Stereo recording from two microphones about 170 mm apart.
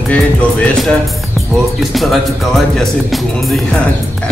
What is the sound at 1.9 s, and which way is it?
Speech, centre (ahead or behind).